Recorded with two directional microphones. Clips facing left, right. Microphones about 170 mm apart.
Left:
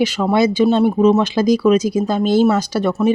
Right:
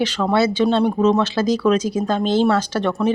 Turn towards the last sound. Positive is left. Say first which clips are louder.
# left 3 dB
turn(degrees=10)  # may be behind; listen again after turning